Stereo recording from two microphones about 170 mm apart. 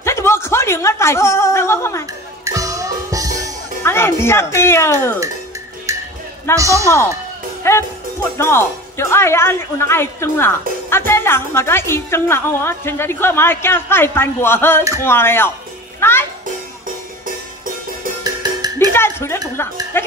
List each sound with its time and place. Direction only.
0.0 s a sound: 15° left (ahead or behind)
2.4 s music: 20° right (ahead or behind)
3.8 s speech: 15° left (ahead or behind)
5.9 s music: 20° right (ahead or behind)
6.5 s a man's voice: 20° right (ahead or behind)
7.7 s music: 15° left (ahead or behind)
8.4 s a woman's voice: 15° left (ahead or behind)
18.2 s music: 20° right (ahead or behind)
18.9 s a woman's voice: 15° left (ahead or behind)